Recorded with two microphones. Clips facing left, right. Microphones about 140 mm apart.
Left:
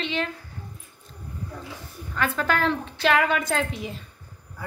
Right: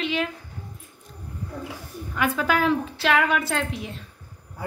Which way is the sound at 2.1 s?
10° right (ahead or behind).